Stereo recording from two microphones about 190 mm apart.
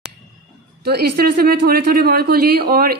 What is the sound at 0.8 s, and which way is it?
A woman's voice, 55° right (ahead or behind).